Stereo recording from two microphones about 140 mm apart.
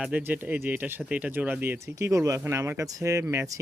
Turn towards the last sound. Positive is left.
turn(degrees=-20)  # may be behind; listen again after turning